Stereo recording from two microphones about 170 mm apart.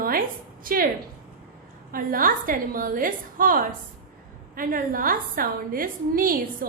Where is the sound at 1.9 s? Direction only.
55° right (ahead or behind).